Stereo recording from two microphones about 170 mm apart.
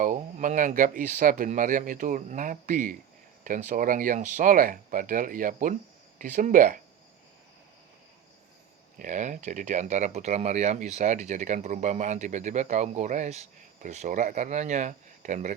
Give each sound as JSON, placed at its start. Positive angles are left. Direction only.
{"t": 0.0, "sound": "speech", "side_deg": -50}
{"t": 9.0, "sound": "speech", "side_deg": -45}